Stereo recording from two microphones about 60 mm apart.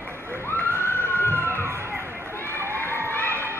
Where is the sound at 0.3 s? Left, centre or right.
Left.